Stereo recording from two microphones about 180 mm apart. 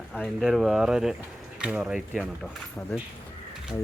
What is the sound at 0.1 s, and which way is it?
Speech, centre (ahead or behind).